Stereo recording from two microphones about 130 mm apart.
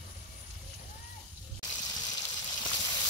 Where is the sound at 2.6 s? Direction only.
35° left (ahead or behind).